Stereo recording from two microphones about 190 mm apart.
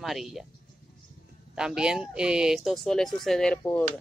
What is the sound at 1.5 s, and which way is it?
Speech, 5° right (ahead or behind).